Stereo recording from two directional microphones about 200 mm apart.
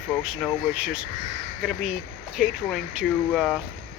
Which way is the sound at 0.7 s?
5° right (ahead or behind).